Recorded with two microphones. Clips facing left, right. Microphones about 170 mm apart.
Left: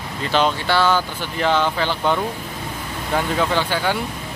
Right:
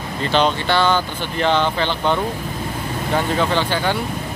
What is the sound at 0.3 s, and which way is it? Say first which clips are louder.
Speech: right 1 dB; 5° left (ahead or behind).